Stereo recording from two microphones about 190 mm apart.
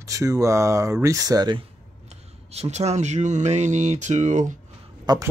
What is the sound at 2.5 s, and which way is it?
Speech, 35° right (ahead or behind).